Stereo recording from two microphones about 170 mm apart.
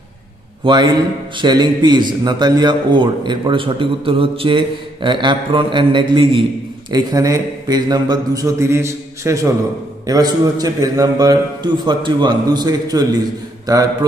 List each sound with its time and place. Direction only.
0.7 s a man's voice: 25° right (ahead or behind)